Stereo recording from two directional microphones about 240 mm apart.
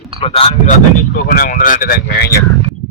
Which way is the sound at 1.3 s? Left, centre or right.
Left.